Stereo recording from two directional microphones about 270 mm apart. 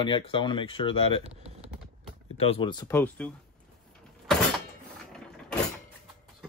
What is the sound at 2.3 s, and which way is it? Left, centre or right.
Speech, left.